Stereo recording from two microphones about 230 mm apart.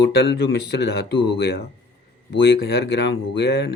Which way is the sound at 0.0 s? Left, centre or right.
Left.